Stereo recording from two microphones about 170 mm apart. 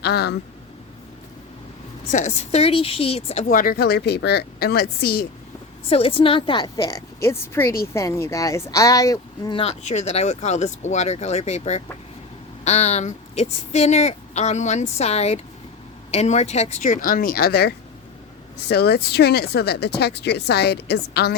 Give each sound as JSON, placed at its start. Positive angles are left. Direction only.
{"t": 0.0, "sound": "speech", "side_deg": 75}
{"t": 2.0, "sound": "speech", "side_deg": 45}
{"t": 3.5, "sound": "speech", "side_deg": 55}
{"t": 5.9, "sound": "a woman's voice", "side_deg": 35}